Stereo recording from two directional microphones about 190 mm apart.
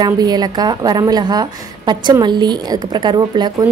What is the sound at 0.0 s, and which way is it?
A woman's voice, 20° right (ahead or behind).